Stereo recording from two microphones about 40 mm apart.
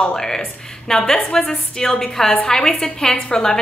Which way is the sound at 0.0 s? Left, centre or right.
Centre.